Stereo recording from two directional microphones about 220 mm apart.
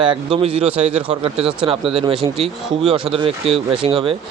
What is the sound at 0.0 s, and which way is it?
Speech, 20° right (ahead or behind).